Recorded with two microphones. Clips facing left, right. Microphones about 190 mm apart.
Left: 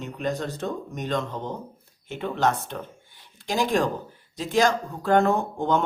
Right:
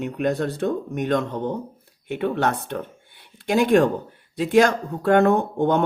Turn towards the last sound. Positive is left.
turn(degrees=-60)  # may be behind; listen again after turning